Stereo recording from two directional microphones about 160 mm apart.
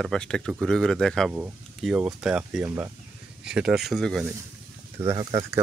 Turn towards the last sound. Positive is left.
turn(degrees=-20)  # may be behind; listen again after turning